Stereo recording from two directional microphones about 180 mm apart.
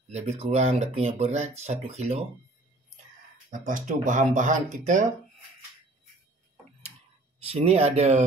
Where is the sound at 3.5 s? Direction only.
45° right (ahead or behind).